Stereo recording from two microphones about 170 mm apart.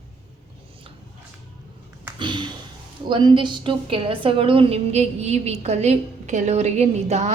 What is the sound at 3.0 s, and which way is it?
A woman's voice, 25° right (ahead or behind).